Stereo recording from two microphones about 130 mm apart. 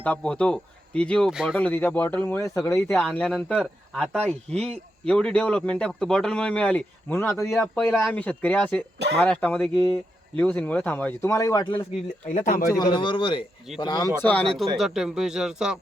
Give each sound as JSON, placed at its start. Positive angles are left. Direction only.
{"t": 0.0, "sound": "speech", "side_deg": 10}
{"t": 1.3, "sound": "speech", "side_deg": -5}
{"t": 1.5, "sound": "speech", "side_deg": 10}
{"t": 3.2, "sound": "speech", "side_deg": 5}
{"t": 9.7, "sound": "speech", "side_deg": -35}
{"t": 10.3, "sound": "speech", "side_deg": 10}
{"t": 12.2, "sound": "speech", "side_deg": 75}
{"t": 12.7, "sound": "speech", "side_deg": 35}
{"t": 14.2, "sound": "speech", "side_deg": 10}